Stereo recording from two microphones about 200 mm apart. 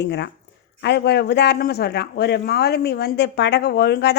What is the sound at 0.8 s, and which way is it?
A man's voice, 55° left (ahead or behind).